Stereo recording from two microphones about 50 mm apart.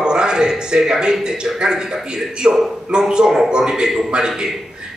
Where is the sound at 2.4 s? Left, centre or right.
Centre.